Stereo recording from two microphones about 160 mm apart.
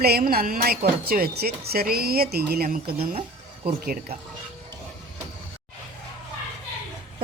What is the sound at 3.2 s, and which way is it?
Music, 35° right (ahead or behind).